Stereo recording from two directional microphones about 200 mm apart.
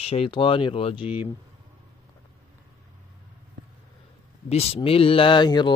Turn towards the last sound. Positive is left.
turn(degrees=20)  # may be behind; listen again after turning